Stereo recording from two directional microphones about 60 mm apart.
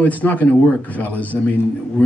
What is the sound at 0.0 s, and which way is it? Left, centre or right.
Speech, left.